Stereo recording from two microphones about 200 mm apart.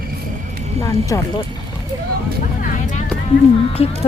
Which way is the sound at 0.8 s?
15° left (ahead or behind).